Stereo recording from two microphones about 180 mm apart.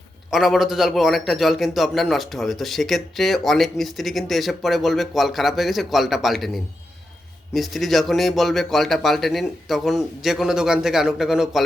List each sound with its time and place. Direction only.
0.3 s a man's voice: centre (ahead or behind)